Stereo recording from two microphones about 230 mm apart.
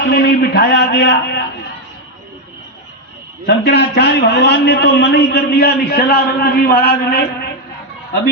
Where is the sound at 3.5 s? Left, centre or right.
Left.